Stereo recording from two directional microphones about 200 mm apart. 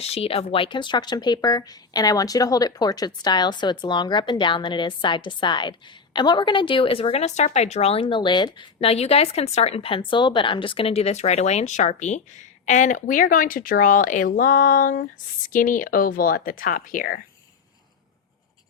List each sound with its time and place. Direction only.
0.0 s a woman's voice: 30° left (ahead or behind)